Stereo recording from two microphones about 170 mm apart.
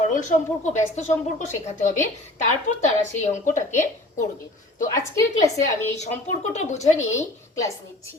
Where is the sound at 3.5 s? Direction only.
50° left (ahead or behind).